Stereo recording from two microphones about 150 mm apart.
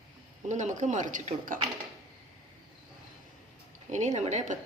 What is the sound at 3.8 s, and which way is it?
Speech, 50° right (ahead or behind).